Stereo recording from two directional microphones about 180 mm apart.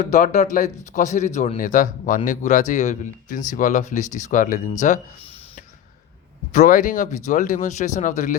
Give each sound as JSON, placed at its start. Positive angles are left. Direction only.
{"t": 0.0, "sound": "speech", "side_deg": 45}
{"t": 6.5, "sound": "speech", "side_deg": 45}